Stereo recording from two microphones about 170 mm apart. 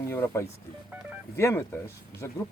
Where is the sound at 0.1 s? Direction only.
15° left (ahead or behind).